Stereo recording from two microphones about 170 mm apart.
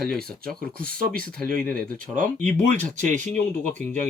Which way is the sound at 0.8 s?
55° right (ahead or behind).